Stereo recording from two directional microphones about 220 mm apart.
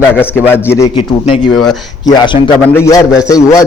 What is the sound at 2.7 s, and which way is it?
Speech, 15° left (ahead or behind).